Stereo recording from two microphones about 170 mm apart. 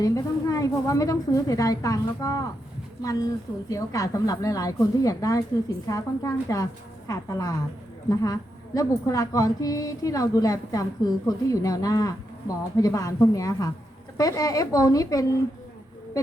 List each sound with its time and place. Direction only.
0.0 s a woman's voice: 20° left (ahead or behind)
3.7 s a woman's voice: 20° left (ahead or behind)